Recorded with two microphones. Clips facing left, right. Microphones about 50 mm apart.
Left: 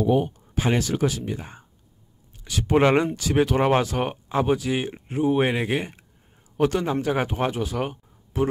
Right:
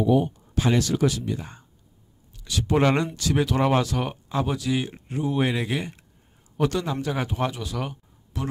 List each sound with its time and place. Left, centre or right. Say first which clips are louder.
0.0 s speech: even; left